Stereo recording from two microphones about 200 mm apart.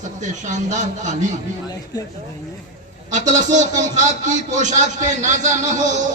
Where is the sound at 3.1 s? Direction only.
35° right (ahead or behind).